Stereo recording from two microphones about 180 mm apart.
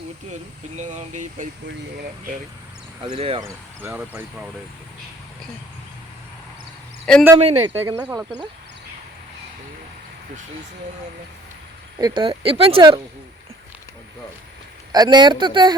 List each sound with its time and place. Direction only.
0.8 s speech: 40° right (ahead or behind)
3.0 s speech: 30° right (ahead or behind)
3.8 s speech: 10° right (ahead or behind)
7.0 s speech: 5° left (ahead or behind)
7.3 s speech: 35° right (ahead or behind)
7.9 s speech: 10° right (ahead or behind)
11.9 s speech: 25° right (ahead or behind)
14.9 s speech: 25° right (ahead or behind)